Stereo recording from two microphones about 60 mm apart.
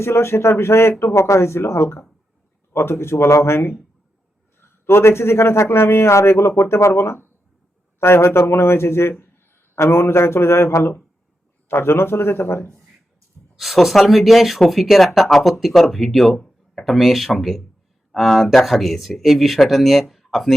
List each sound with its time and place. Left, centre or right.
0.0 s speech: left
4.9 s speech: left
11.7 s speech: left
13.6 s speech: centre